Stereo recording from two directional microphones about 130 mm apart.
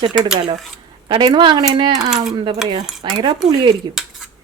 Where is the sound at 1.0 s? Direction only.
35° right (ahead or behind).